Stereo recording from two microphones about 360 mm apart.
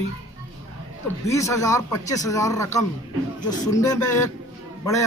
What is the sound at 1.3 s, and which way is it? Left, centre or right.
Speech, centre.